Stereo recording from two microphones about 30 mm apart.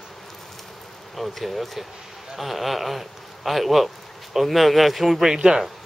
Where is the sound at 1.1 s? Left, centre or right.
Centre.